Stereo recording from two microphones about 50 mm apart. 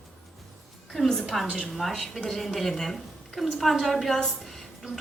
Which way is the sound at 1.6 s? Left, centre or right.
Centre.